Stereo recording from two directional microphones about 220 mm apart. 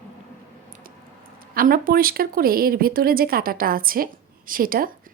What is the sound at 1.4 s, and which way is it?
Speech, 40° right (ahead or behind).